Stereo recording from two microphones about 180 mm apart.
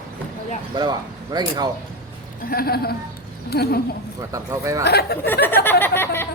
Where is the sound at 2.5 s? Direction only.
60° left (ahead or behind).